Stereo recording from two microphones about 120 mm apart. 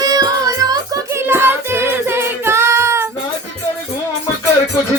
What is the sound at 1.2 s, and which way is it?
Music, 20° right (ahead or behind).